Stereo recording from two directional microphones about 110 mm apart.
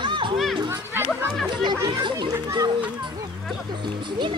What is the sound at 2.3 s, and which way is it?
Speech, 25° right (ahead or behind).